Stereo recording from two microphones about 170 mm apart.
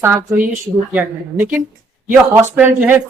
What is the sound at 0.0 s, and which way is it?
A man's voice, 15° right (ahead or behind).